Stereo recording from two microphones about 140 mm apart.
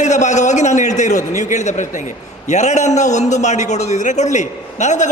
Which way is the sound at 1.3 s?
55° left (ahead or behind).